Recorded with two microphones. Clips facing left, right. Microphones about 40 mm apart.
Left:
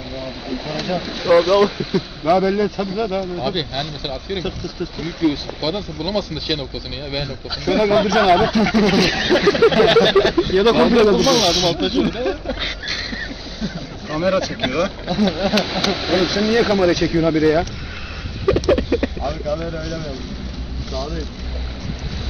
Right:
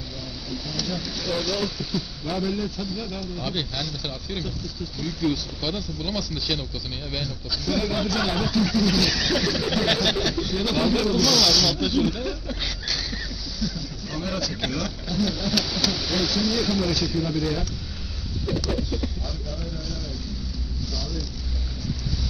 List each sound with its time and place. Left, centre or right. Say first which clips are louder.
0.5 s speech: left 7 dB; left
3.3 s speech: left 7 dB; left
4.5 s speech: left 7 dB; left
7.6 s speech: left 10 dB; left
10.6 s speech: left 10 dB; left